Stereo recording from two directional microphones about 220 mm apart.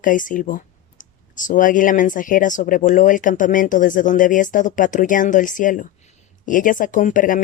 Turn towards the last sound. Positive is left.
turn(degrees=35)  # may be behind; listen again after turning